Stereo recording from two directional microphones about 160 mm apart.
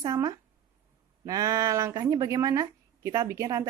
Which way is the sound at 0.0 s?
25° right (ahead or behind).